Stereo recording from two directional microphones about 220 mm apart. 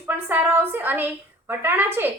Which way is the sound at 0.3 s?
10° right (ahead or behind).